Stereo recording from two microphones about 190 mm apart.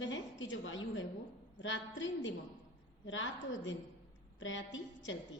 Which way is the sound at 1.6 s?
80° left.